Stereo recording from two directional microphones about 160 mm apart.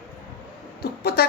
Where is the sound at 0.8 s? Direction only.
75° left (ahead or behind).